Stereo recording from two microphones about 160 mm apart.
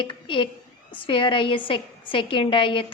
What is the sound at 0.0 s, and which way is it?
A woman's voice, 30° left (ahead or behind).